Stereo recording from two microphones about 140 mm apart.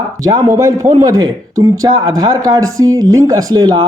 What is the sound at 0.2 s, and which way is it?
A man's voice, 25° right (ahead or behind).